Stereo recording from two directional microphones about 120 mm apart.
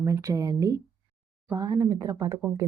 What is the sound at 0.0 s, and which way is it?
Speech, 25° right (ahead or behind).